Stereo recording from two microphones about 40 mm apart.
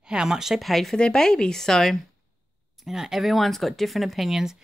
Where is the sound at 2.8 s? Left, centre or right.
Centre.